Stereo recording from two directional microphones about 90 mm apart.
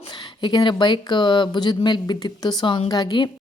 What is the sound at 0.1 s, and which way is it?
Speech, 60° left (ahead or behind).